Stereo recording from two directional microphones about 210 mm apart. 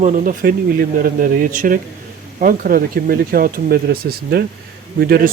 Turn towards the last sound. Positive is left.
turn(degrees=-45)  # may be behind; listen again after turning